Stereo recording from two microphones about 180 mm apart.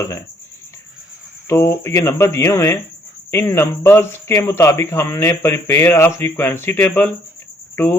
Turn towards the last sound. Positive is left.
turn(degrees=10)  # may be behind; listen again after turning